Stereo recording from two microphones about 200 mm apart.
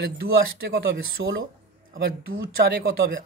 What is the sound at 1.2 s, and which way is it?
Speech, 55° right (ahead or behind).